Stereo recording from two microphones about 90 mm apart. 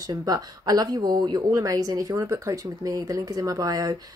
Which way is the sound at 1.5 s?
35° right (ahead or behind).